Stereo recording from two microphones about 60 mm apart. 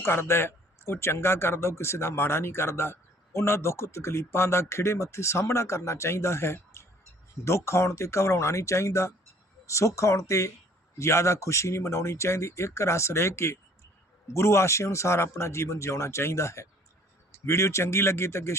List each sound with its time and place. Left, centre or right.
0.0 s speech: left